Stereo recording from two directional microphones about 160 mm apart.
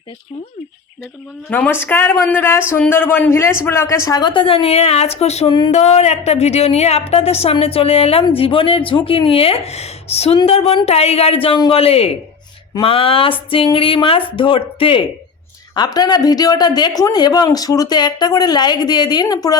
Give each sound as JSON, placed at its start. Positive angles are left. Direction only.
{"t": 1.5, "sound": "a woman's voice", "side_deg": 10}